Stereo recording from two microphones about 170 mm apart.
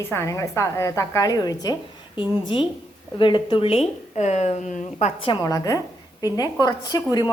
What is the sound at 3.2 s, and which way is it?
Speech, 30° left (ahead or behind).